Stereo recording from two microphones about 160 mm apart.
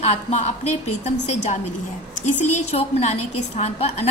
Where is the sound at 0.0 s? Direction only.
45° left (ahead or behind).